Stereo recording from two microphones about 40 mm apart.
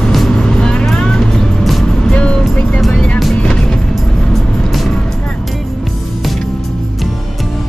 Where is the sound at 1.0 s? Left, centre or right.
Left.